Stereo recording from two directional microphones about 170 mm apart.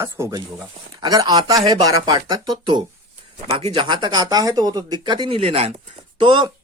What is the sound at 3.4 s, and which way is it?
Speech, 35° right (ahead or behind).